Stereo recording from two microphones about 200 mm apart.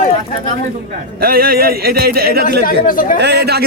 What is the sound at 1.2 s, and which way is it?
Speech, 45° right (ahead or behind).